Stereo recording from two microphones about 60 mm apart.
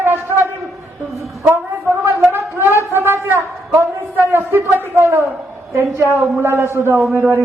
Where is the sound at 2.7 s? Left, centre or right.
Right.